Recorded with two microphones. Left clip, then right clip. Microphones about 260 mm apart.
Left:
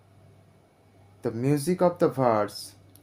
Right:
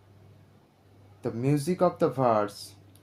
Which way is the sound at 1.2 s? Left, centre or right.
Left.